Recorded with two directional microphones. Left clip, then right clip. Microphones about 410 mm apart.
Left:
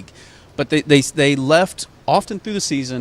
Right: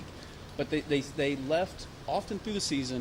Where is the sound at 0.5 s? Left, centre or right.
Left.